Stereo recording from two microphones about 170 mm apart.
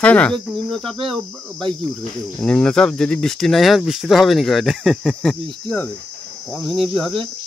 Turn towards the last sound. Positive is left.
turn(degrees=0)  # may be behind; listen again after turning